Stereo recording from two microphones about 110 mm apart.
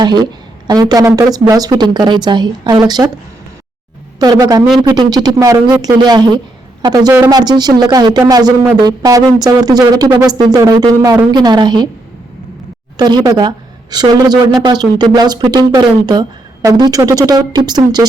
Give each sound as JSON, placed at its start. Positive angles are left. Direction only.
{"t": 0.0, "sound": "speech", "side_deg": -40}
{"t": 4.2, "sound": "a man's voice", "side_deg": -35}
{"t": 13.0, "sound": "speech", "side_deg": -40}